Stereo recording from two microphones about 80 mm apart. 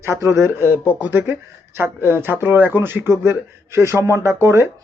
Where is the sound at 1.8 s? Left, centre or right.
Right.